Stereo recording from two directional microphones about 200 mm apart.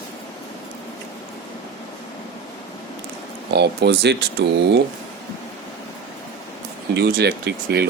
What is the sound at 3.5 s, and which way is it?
Speech, 55° right (ahead or behind).